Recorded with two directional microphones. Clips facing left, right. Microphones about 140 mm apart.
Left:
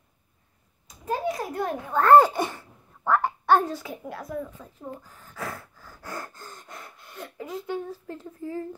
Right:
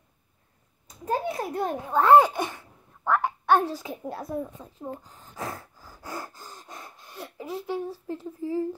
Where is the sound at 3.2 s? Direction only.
10° right (ahead or behind).